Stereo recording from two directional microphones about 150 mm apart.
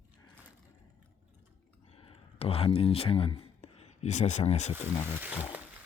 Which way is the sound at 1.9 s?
40° left (ahead or behind).